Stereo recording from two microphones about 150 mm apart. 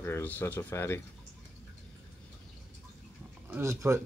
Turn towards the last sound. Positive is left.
turn(degrees=-20)  # may be behind; listen again after turning